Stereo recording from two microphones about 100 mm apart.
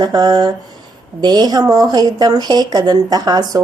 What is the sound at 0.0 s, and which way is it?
Speech, 45° right (ahead or behind).